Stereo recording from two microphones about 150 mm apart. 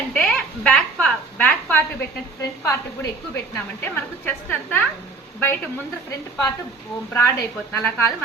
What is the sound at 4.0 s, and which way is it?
Speech, 10° left (ahead or behind).